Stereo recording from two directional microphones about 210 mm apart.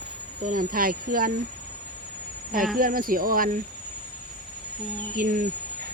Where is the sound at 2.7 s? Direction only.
45° right (ahead or behind).